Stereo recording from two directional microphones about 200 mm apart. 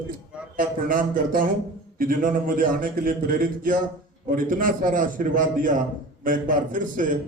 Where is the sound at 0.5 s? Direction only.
45° right (ahead or behind).